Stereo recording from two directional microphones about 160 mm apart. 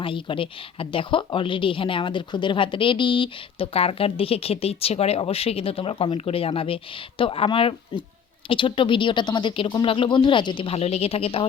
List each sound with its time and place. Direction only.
0.0 s a woman's voice: 35° left (ahead or behind)